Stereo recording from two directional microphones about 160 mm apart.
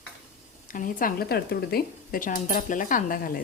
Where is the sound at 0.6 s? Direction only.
60° left (ahead or behind).